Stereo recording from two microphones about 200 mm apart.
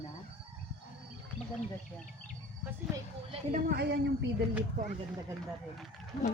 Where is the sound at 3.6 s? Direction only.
55° right (ahead or behind).